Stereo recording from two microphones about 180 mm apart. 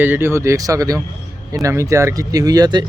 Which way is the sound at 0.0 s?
10° right (ahead or behind).